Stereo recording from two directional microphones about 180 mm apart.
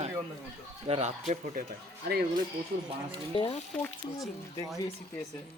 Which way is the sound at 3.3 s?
30° left (ahead or behind).